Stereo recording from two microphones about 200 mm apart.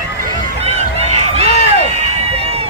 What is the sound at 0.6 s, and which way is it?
Run, 30° right (ahead or behind).